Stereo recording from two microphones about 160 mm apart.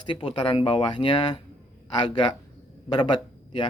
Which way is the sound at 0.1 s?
35° left (ahead or behind).